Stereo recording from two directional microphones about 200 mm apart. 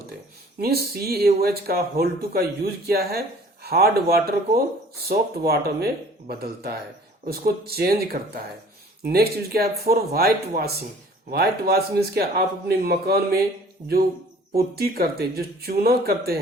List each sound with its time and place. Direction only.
0.6 s speech: 50° right (ahead or behind)
14.5 s speech: 50° right (ahead or behind)